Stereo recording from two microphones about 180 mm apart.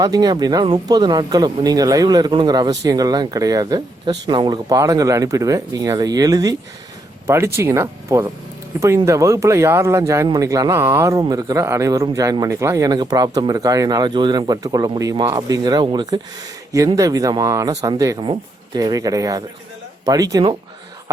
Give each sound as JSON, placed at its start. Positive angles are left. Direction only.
{"t": 0.0, "sound": "speech", "side_deg": -20}